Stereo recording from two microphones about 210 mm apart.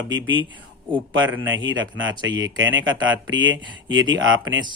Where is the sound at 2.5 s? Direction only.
60° right (ahead or behind).